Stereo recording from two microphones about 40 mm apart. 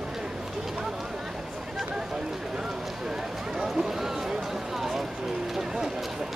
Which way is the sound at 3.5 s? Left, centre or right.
Centre.